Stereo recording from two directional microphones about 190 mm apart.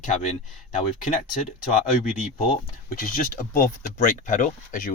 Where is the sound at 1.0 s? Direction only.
45° left (ahead or behind).